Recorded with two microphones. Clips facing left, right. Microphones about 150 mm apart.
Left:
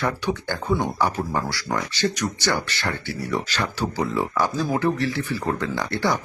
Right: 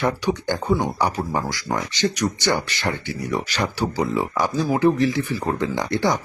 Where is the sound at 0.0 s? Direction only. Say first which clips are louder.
Right 3 dB; 15° right (ahead or behind).